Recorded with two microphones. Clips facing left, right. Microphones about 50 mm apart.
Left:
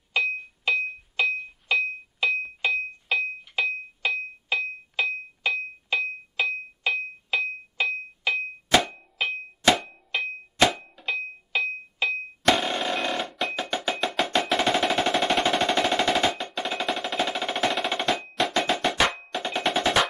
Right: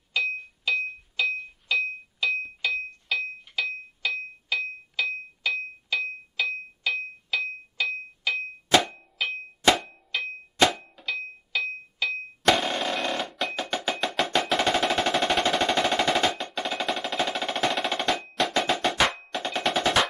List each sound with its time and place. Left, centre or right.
0.1 s music: left
0.7 s a sound: left
1.7 s music: left
2.6 s a sound: left
8.7 s hammer: centre
9.2 s a sound: left
9.7 s hammer: centre
10.1 s clang: left
10.6 s a sound: centre
11.1 s music: left
12.4 s music: centre
15.5 s machine gun: centre